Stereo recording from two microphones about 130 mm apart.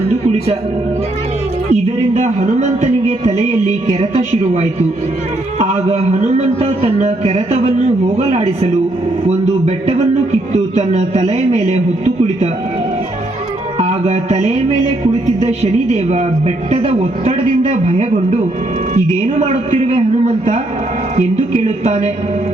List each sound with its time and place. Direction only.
1.7 s a sound: 60° right (ahead or behind)
5.5 s a man's voice: 60° right (ahead or behind)
13.7 s a man's voice: 55° right (ahead or behind)